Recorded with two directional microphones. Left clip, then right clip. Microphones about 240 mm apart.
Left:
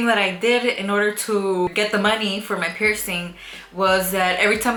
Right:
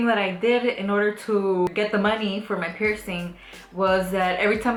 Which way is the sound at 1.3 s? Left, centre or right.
Right.